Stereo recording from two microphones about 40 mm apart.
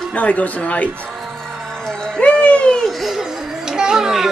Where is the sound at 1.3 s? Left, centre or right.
Centre.